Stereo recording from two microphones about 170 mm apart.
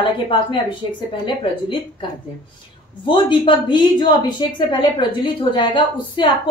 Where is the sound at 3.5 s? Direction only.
25° left (ahead or behind).